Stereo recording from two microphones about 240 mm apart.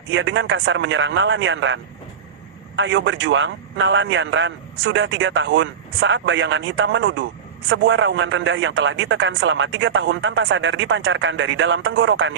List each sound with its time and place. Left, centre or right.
0.1 s a man's voice: right